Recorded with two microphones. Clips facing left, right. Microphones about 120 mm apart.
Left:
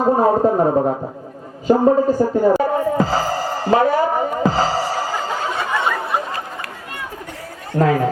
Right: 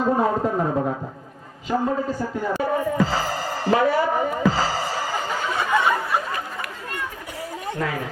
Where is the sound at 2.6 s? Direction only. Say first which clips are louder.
Left 4 dB; 40° left (ahead or behind).